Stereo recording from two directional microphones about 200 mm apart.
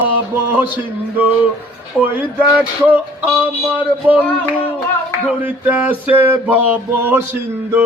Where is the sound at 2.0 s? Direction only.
10° right (ahead or behind).